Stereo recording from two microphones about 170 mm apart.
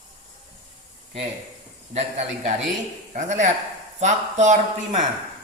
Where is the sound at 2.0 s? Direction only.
40° right (ahead or behind).